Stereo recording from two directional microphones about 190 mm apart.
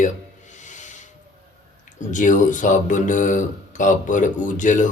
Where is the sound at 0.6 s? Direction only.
40° left (ahead or behind).